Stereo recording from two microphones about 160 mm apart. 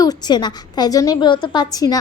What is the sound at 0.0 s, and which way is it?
A woman's voice, 25° left (ahead or behind).